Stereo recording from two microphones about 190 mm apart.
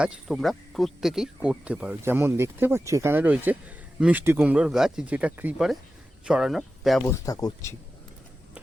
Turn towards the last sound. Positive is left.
turn(degrees=20)  # may be behind; listen again after turning